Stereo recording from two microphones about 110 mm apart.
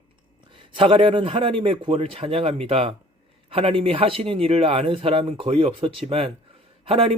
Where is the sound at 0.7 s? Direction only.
50° right (ahead or behind).